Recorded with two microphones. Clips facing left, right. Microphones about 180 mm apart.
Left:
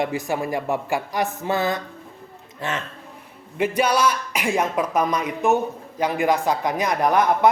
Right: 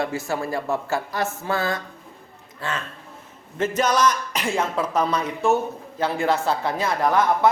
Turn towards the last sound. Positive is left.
turn(degrees=20)  # may be behind; listen again after turning